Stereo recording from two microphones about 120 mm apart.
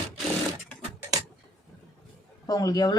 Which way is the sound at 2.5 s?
30° left (ahead or behind).